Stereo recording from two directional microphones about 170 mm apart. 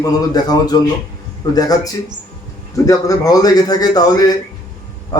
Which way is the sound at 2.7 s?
20° left (ahead or behind).